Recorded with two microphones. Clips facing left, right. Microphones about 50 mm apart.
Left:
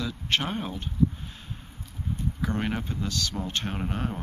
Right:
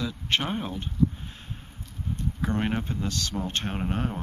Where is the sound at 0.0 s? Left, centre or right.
Centre.